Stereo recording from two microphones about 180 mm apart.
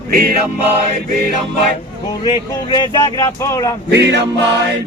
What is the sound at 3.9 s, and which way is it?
Music, 70° right (ahead or behind).